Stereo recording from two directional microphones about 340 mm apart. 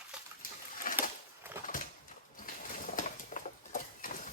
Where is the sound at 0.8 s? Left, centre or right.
Left.